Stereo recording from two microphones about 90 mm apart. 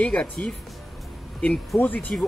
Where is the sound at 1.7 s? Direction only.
20° left (ahead or behind).